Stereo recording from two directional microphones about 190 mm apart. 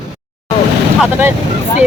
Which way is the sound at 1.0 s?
10° right (ahead or behind).